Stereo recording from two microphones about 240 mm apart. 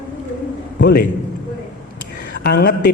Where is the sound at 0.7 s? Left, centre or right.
Left.